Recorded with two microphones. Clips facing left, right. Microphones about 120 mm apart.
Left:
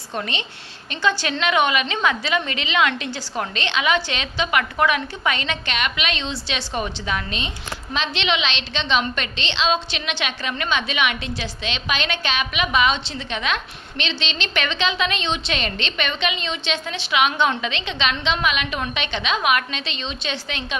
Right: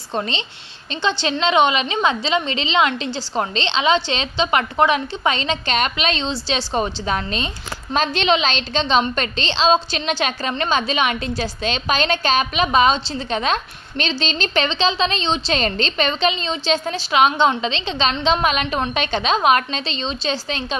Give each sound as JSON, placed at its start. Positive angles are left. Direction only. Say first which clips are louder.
{"t": 0.1, "sound": "a woman's voice", "louder": "right 3 dB", "side_deg": -30}